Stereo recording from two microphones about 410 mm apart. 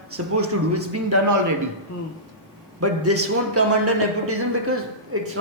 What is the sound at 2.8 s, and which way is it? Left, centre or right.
Speech, right.